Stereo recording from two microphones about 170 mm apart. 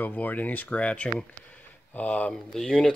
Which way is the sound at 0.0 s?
10° left (ahead or behind).